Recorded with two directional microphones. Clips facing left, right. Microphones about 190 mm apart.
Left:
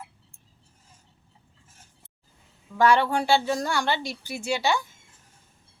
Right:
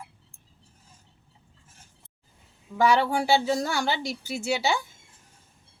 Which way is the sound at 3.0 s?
5° right (ahead or behind).